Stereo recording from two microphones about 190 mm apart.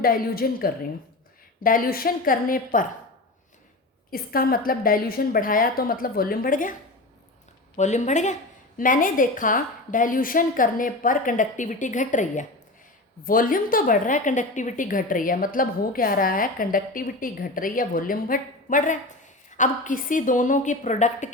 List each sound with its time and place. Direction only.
0.0 s a woman's voice: 50° left (ahead or behind)
4.1 s a woman's voice: 50° left (ahead or behind)
7.8 s a woman's voice: 40° left (ahead or behind)